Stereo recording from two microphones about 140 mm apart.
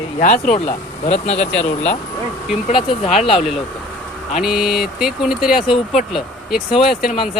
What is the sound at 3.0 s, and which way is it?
Speech, 50° left (ahead or behind).